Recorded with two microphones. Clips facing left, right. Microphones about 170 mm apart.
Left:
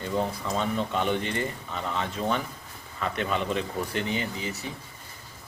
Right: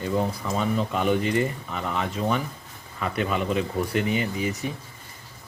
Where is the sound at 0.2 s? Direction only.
5° right (ahead or behind).